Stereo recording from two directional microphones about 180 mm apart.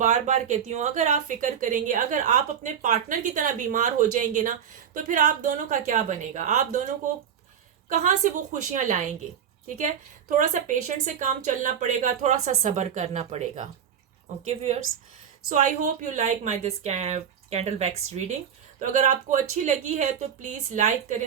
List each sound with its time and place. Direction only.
0.0 s a woman's voice: 40° right (ahead or behind)